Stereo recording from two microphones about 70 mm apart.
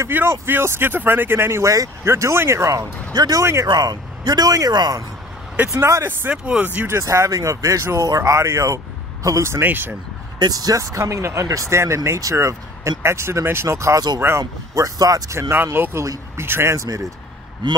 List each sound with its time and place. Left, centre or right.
0.1 s speech: right
3.2 s a man's voice: right
3.6 s a man's voice: right
5.7 s speech: right
6.4 s speech: right
7.0 s speech: right
9.6 s speech: right
10.4 s speech: right
10.9 s speech: right
14.4 s speech: right
15.3 s speech: right
15.6 s speech: right
16.7 s speech: right